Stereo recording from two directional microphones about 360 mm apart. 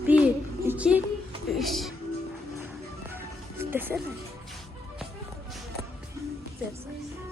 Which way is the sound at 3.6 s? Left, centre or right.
Centre.